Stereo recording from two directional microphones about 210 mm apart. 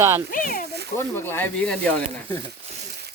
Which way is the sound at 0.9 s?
10° left (ahead or behind).